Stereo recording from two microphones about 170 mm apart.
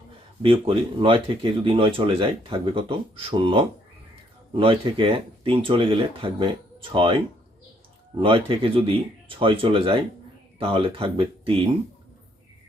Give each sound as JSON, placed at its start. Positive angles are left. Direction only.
{"t": 0.4, "sound": "speech", "side_deg": -30}
{"t": 8.2, "sound": "speech", "side_deg": -30}